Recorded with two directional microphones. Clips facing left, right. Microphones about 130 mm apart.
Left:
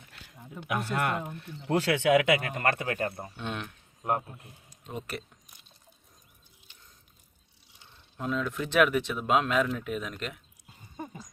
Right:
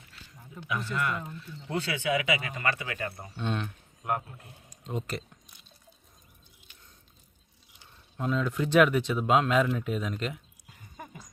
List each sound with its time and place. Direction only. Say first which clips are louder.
0.1 s speech: left 3 dB; 60° left (ahead or behind)
3.3 s speech: right 4 dB; 5° left (ahead or behind)
4.9 s speech: right 3 dB; 5° left (ahead or behind)
8.1 s speech: right 2 dB; centre (ahead or behind)
10.7 s dog: left 5 dB; 30° left (ahead or behind)